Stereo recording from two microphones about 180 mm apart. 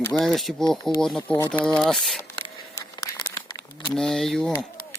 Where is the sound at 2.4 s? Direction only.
20° left (ahead or behind).